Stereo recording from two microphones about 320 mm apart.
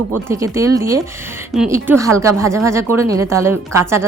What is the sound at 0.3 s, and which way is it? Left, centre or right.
A woman's voice, centre.